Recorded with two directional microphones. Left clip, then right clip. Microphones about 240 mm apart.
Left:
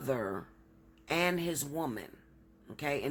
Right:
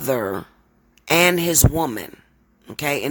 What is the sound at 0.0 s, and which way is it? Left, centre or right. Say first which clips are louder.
A man's voice: right 12 dB; right.